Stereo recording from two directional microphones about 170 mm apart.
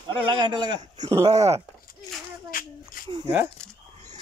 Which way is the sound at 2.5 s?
55° left (ahead or behind).